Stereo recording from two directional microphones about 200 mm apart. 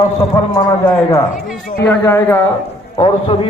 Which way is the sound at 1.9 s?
10° left (ahead or behind).